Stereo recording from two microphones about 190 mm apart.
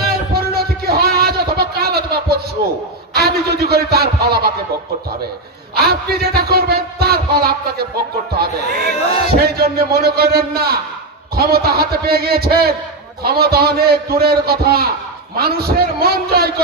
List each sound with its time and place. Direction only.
0.3 s a sound: 55° right (ahead or behind)
3.2 s a man's voice: 55° right (ahead or behind)
5.8 s a man's voice: 55° right (ahead or behind)